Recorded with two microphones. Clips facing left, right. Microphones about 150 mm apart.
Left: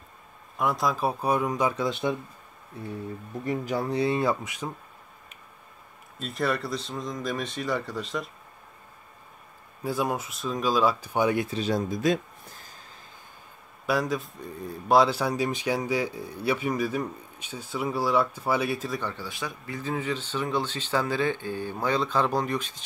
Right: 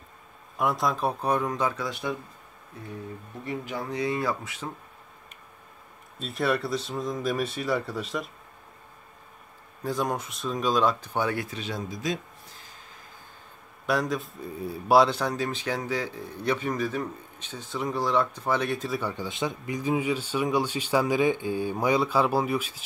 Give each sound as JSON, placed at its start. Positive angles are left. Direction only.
{"t": 0.6, "sound": "speech", "side_deg": 0}
{"t": 3.4, "sound": "speech", "side_deg": 40}
{"t": 6.1, "sound": "speech", "side_deg": 0}
{"t": 9.8, "sound": "speech", "side_deg": 5}
{"t": 11.5, "sound": "speech", "side_deg": 40}
{"t": 13.8, "sound": "speech", "side_deg": 0}
{"t": 18.9, "sound": "speech", "side_deg": -10}
{"t": 19.2, "sound": "speech", "side_deg": -20}